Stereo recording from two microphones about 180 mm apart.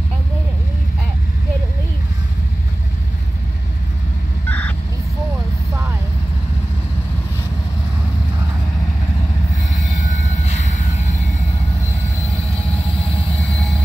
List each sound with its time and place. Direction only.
4.5 s vehicle: 10° left (ahead or behind)
10.0 s train: 40° left (ahead or behind)